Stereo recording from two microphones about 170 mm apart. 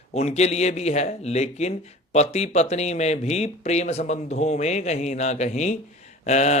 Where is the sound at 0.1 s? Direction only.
40° left (ahead or behind).